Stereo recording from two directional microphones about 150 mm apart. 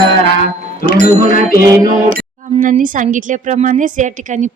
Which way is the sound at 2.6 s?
65° right (ahead or behind).